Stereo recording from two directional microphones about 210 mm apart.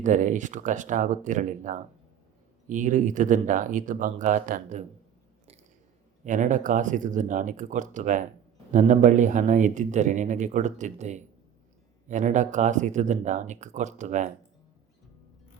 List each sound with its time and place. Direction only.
0.0 s speech: 35° right (ahead or behind)
6.2 s speech: 35° right (ahead or behind)